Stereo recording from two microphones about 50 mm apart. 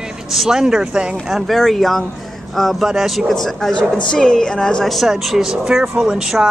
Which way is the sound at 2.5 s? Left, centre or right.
Centre.